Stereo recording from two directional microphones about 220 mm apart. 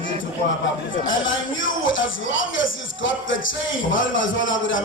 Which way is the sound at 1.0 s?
60° left (ahead or behind).